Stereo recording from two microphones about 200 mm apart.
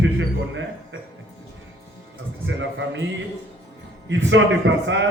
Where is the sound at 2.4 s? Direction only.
70° right (ahead or behind).